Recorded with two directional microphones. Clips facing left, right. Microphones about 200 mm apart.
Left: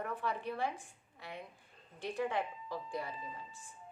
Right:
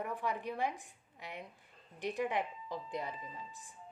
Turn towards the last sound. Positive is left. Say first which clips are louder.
# even
turn(degrees=-20)  # may be behind; listen again after turning